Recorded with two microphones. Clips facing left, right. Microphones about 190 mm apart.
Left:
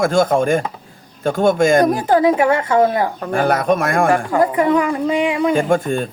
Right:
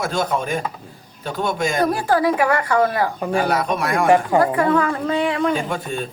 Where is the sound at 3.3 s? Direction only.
50° left (ahead or behind).